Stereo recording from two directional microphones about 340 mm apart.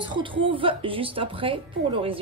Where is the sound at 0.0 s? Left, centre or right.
Centre.